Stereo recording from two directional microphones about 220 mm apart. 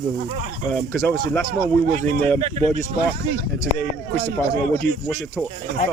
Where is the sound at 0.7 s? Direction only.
5° left (ahead or behind).